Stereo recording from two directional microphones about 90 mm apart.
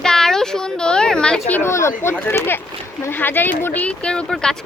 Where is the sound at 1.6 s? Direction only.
30° left (ahead or behind); by 4.5 s 10° left (ahead or behind).